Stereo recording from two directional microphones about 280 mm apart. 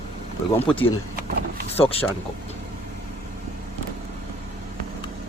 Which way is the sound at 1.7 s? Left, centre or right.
Centre.